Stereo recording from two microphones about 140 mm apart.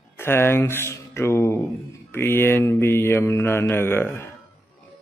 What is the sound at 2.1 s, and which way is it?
Mantra, 15° left (ahead or behind).